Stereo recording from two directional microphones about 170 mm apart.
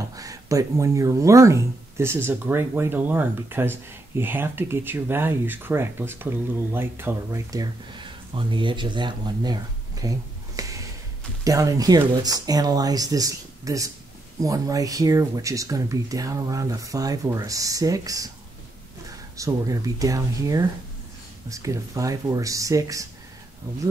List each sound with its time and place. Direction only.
0.1 s speech: 20° right (ahead or behind)
8.4 s speech: 30° right (ahead or behind)
19.3 s speech: 20° right (ahead or behind)